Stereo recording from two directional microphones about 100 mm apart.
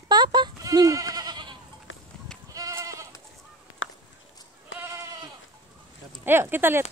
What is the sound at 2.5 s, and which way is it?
Goat, 35° right (ahead or behind).